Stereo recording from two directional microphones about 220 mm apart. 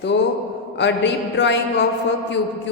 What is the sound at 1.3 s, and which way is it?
Speech, 55° left (ahead or behind).